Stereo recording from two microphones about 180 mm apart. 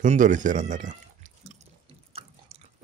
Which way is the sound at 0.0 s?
45° right (ahead or behind).